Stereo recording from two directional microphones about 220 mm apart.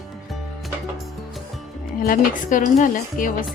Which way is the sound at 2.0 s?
40° left (ahead or behind).